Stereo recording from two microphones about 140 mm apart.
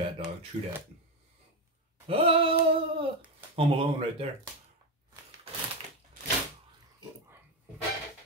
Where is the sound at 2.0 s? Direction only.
40° right (ahead or behind).